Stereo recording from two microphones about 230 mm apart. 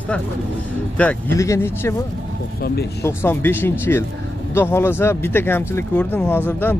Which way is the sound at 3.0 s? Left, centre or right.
Centre.